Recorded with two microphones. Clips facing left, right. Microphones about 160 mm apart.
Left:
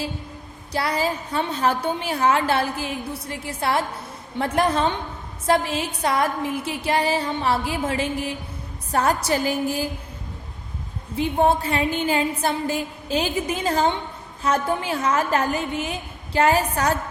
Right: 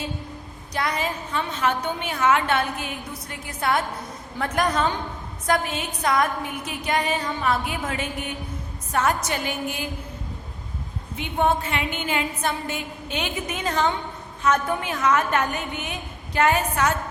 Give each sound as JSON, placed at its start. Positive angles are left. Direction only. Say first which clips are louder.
{"t": 0.7, "sound": "a woman's voice", "louder": "left 3 dB", "side_deg": 30}
{"t": 11.2, "sound": "a woman's voice", "louder": "left 3 dB", "side_deg": 35}